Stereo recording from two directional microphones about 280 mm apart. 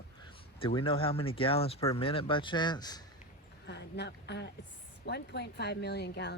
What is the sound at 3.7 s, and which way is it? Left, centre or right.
Speech, left.